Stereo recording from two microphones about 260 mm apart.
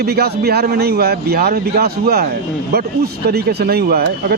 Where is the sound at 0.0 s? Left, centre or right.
Right.